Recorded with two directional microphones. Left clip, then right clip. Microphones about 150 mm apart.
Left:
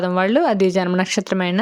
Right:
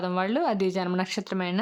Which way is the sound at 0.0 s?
30° left (ahead or behind).